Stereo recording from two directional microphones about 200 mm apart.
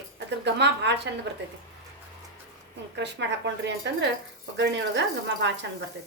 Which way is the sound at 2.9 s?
60° right (ahead or behind).